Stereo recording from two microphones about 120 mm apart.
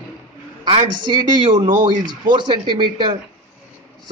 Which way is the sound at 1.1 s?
40° right (ahead or behind).